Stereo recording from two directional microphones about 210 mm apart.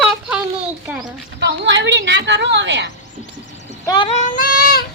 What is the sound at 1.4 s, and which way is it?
A woman's voice, 55° right (ahead or behind).